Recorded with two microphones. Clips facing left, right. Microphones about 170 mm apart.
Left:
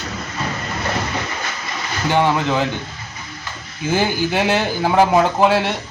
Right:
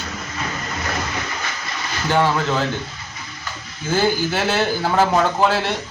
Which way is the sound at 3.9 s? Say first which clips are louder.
Even; 15° left (ahead or behind).